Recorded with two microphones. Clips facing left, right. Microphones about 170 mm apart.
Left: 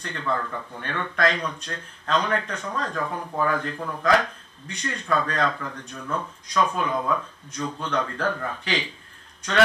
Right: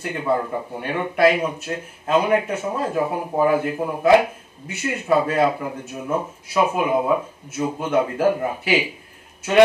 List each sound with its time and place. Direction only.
0.1 s speech: 15° right (ahead or behind)
6.5 s speech: 10° right (ahead or behind)